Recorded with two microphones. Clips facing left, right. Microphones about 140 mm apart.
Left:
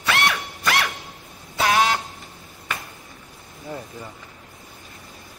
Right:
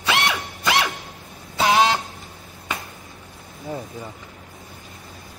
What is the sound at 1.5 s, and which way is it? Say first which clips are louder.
Vehicle horn: right 2 dB; 25° right (ahead or behind).